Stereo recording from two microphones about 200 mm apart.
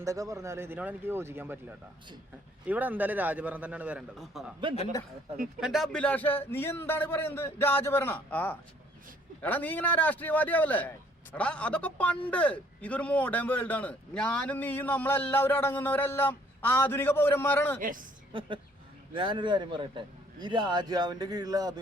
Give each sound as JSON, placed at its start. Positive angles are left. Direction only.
{"t": 0.0, "sound": "a man's voice", "side_deg": -15}
{"t": 2.6, "sound": "a man's voice", "side_deg": -10}
{"t": 5.5, "sound": "a man's voice", "side_deg": 0}
{"t": 17.7, "sound": "a woman's voice", "side_deg": -40}
{"t": 18.3, "sound": "a man's voice", "side_deg": -25}